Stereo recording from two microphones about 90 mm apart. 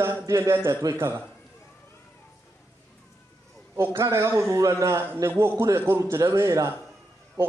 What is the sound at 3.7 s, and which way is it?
A man's voice, 30° right (ahead or behind).